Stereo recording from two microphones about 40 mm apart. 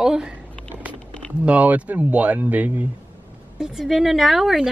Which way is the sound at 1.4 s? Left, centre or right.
Right.